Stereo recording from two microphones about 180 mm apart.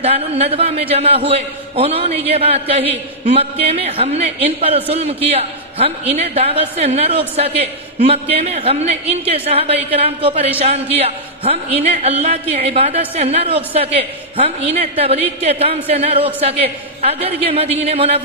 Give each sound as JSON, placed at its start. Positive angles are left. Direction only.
{"t": 0.0, "sound": "a man's voice", "side_deg": -35}